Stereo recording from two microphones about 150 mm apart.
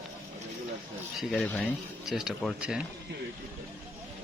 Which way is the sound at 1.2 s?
Centre (ahead or behind).